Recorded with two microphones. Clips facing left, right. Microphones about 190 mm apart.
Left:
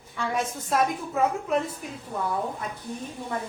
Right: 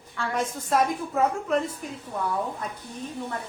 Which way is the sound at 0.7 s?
5° left (ahead or behind).